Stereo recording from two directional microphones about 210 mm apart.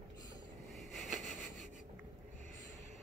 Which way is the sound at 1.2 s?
35° right (ahead or behind).